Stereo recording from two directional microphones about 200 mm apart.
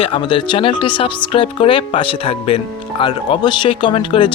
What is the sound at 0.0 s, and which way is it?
Speech, 25° left (ahead or behind).